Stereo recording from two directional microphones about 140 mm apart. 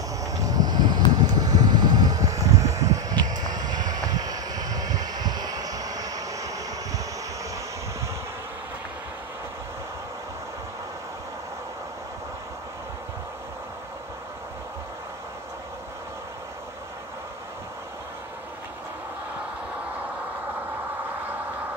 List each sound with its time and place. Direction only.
0.2 s vehicle: 25° right (ahead or behind)